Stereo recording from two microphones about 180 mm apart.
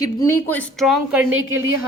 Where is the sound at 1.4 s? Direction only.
90° right.